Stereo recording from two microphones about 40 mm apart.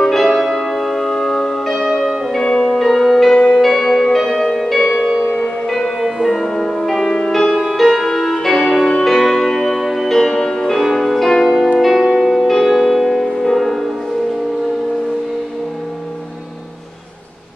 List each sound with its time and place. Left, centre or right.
0.0 s music: centre
2.0 s change ringing: centre
2.4 s music: centre
3.3 s music: centre
3.5 s music: centre
7.1 s music: centre
7.5 s music: centre
10.1 s music: centre
11.8 s music: centre